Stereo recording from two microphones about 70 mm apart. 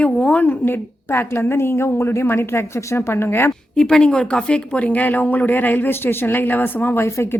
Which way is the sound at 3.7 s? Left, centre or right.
Centre.